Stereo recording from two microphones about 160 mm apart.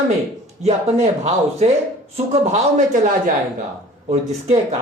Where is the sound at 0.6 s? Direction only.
45° right (ahead or behind).